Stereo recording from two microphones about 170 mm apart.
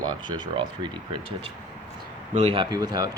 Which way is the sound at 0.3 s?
25° right (ahead or behind).